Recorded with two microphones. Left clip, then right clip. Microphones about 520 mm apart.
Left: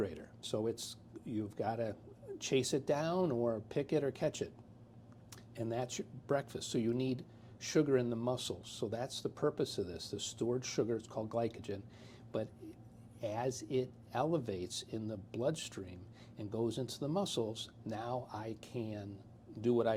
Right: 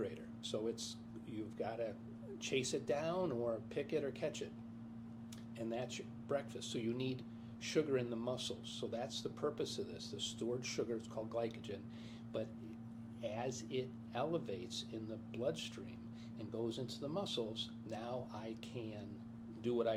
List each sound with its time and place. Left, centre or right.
0.0 s speech: left
5.5 s speech: left
19.6 s speech: left